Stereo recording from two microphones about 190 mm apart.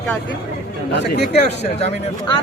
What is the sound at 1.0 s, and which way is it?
Speech, 60° left (ahead or behind).